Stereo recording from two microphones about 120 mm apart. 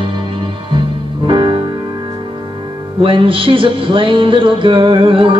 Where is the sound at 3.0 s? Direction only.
50° right (ahead or behind).